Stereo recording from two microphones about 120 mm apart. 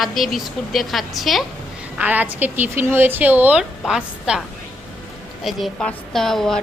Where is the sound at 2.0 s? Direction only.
15° right (ahead or behind).